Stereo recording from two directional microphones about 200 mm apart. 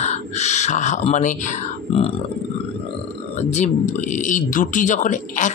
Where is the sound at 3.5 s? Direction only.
35° left (ahead or behind).